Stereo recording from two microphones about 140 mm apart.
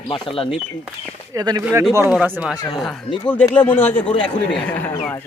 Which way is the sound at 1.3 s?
25° right (ahead or behind).